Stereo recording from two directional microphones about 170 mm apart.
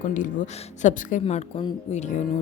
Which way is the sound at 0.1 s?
50° left (ahead or behind).